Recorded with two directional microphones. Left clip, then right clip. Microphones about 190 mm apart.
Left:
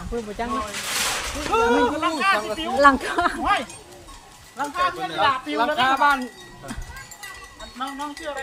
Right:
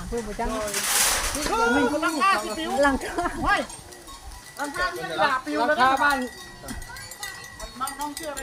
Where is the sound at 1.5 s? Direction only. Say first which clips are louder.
Left 3 dB; 65° left (ahead or behind).